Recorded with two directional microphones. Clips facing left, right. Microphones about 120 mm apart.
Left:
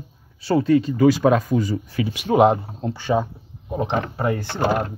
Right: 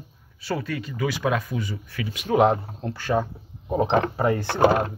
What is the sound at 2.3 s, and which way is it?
Speech, 15° left (ahead or behind).